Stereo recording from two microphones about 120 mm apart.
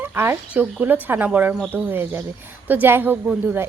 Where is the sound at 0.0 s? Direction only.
20° right (ahead or behind).